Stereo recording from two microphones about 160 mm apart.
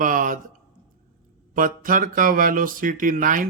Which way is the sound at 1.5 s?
60° right (ahead or behind).